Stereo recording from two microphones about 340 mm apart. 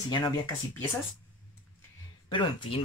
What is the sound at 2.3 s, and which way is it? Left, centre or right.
Speech, centre.